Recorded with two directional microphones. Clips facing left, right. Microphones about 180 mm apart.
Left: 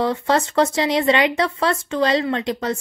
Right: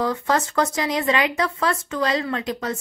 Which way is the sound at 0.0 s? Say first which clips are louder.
Left 3 dB; 30° left (ahead or behind).